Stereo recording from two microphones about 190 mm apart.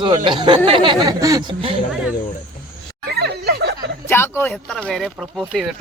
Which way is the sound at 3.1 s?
60° right (ahead or behind).